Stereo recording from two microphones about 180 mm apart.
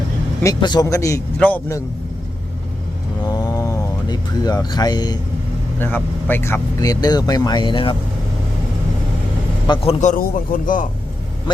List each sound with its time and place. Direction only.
0.4 s speech: 20° left (ahead or behind)
3.2 s a sound: 20° left (ahead or behind)
5.8 s speech: 10° left (ahead or behind); by 7.9 s 30° left (ahead or behind)
9.6 s a man's voice: 25° left (ahead or behind)
10.0 s a man's voice: 45° left (ahead or behind)